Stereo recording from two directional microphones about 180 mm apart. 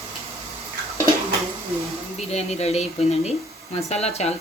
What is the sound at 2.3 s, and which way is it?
Speech, 35° left (ahead or behind).